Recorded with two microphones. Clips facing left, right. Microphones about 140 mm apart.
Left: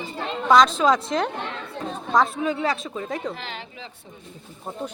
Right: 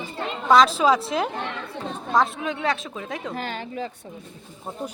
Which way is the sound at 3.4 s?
45° right (ahead or behind).